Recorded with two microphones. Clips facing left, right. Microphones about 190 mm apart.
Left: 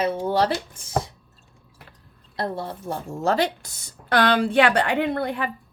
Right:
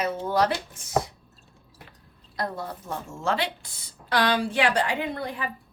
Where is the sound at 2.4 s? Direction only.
30° left (ahead or behind); by 5.5 s 60° left (ahead or behind).